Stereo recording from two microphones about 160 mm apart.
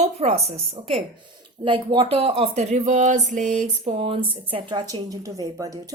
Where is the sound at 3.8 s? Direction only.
35° right (ahead or behind).